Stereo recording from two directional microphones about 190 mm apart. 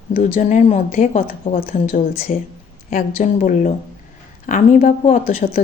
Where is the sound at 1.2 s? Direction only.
50° left (ahead or behind).